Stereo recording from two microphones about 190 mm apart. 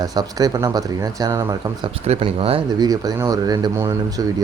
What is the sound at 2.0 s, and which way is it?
Speech, 30° right (ahead or behind).